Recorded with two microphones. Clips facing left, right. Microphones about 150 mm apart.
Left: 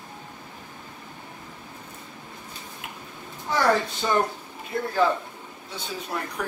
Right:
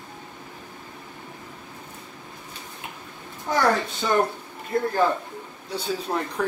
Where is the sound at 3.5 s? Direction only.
45° right (ahead or behind).